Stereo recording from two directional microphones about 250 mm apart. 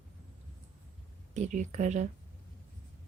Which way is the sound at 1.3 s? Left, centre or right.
Right.